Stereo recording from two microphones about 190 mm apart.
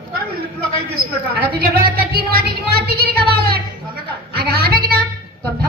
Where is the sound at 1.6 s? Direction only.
50° right (ahead or behind).